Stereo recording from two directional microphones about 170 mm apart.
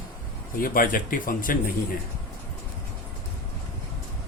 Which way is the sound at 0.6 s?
55° left (ahead or behind).